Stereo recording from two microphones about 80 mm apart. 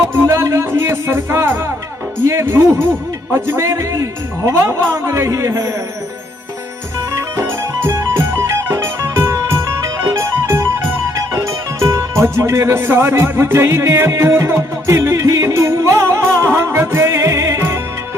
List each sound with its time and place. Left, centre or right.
0.1 s music: right
2.2 s speech: right
3.3 s music: right
3.6 s speech: right
7.1 s music: right